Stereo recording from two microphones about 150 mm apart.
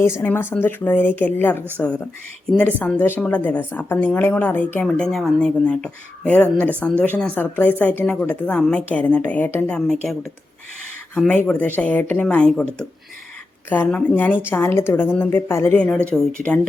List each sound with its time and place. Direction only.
0.0 s a woman's voice: 15° left (ahead or behind)
13.7 s a woman's voice: 10° left (ahead or behind)